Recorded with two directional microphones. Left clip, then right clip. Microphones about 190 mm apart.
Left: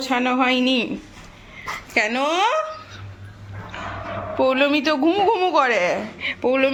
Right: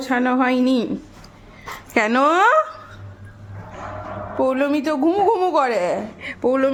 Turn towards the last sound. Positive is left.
turn(degrees=-25)  # may be behind; listen again after turning